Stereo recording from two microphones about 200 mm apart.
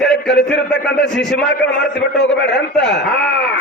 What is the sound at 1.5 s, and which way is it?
A man's voice, 60° left (ahead or behind).